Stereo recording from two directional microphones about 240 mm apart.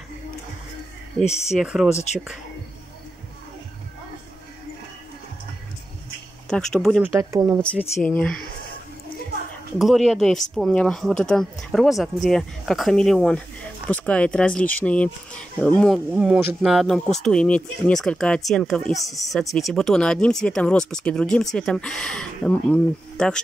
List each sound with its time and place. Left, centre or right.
1.6 s speech: centre
6.5 s speech: centre
8.0 s speech: centre
9.8 s speech: centre
19.0 s speech: centre
19.3 s speech: centre